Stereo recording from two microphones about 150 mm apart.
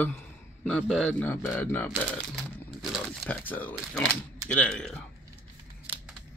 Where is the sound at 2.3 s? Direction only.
Centre (ahead or behind).